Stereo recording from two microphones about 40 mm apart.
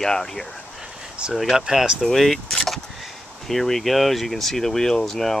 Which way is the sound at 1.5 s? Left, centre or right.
Centre.